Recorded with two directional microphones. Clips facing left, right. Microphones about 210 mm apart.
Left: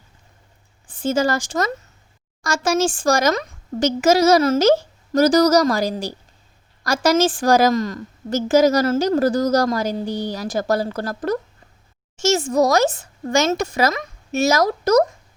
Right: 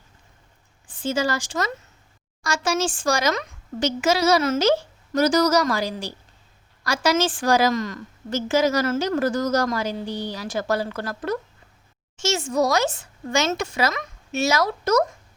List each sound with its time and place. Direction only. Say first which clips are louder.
1.0 s a woman's voice: left 4 dB; 45° left (ahead or behind)